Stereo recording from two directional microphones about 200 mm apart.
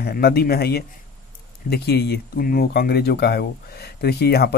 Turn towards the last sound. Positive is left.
turn(degrees=55)  # may be behind; listen again after turning